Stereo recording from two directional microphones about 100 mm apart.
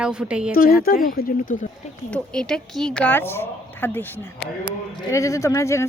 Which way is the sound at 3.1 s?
25° left (ahead or behind).